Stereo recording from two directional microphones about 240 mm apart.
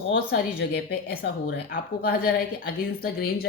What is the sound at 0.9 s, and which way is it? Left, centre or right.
Speech, left.